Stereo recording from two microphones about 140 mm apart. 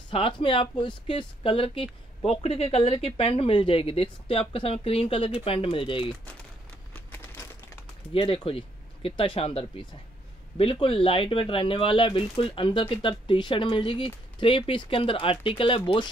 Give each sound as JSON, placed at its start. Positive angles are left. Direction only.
{"t": 0.1, "sound": "speech", "side_deg": 40}
{"t": 6.9, "sound": "a sound", "side_deg": 15}
{"t": 8.1, "sound": "speech", "side_deg": 40}